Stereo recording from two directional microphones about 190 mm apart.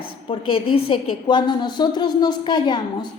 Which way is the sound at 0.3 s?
30° left (ahead or behind).